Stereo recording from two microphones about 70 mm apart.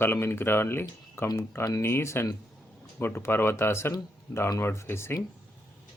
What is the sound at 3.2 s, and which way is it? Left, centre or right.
Speech, left.